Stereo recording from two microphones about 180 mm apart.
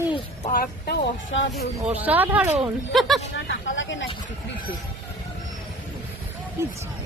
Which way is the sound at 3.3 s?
90° left.